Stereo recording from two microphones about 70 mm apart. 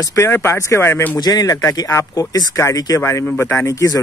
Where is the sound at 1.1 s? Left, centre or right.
Left.